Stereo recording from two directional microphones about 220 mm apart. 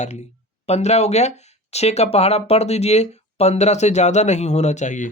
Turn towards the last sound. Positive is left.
turn(degrees=35)  # may be behind; listen again after turning